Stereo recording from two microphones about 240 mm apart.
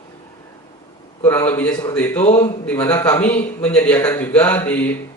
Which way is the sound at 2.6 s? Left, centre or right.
Centre.